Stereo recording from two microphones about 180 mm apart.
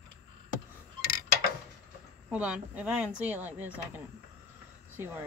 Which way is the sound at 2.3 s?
5° right (ahead or behind).